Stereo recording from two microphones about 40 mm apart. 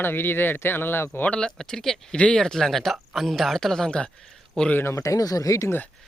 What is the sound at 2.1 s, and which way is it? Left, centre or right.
Speech, left.